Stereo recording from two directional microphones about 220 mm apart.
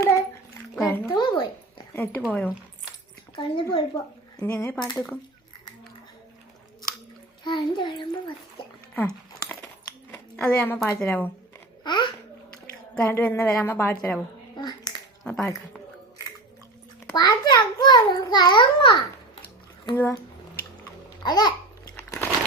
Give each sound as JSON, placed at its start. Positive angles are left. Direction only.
{"t": 0.0, "sound": "a sound", "side_deg": 15}
{"t": 0.8, "sound": "music", "side_deg": 10}
{"t": 1.9, "sound": "speech", "side_deg": 10}
{"t": 3.3, "sound": "a child's voice", "side_deg": 20}
{"t": 7.4, "sound": "a child's voice", "side_deg": 20}
{"t": 9.0, "sound": "a sound", "side_deg": 10}
{"t": 10.1, "sound": "speech", "side_deg": 5}
{"t": 11.8, "sound": "babbling", "side_deg": 20}
{"t": 12.9, "sound": "a woman's voice", "side_deg": 10}
{"t": 14.5, "sound": "a sound", "side_deg": 20}
{"t": 15.2, "sound": "speech", "side_deg": 0}
{"t": 17.2, "sound": "a child's voice", "side_deg": 20}
{"t": 21.2, "sound": "a child's voice", "side_deg": 20}
{"t": 21.9, "sound": "a sound", "side_deg": 10}